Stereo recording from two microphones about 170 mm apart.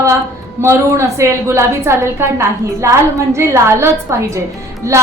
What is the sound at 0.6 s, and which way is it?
A woman's voice, 15° right (ahead or behind).